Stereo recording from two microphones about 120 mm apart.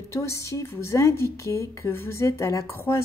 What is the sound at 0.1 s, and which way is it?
A woman's voice, 25° left (ahead or behind).